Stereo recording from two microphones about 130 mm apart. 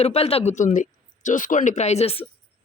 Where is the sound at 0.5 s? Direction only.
85° left; by 2.2 s 50° left (ahead or behind).